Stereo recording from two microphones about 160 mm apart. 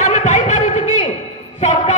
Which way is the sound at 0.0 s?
50° left (ahead or behind).